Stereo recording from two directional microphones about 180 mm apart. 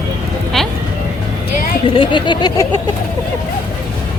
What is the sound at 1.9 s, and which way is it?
Vehicle, 30° left (ahead or behind).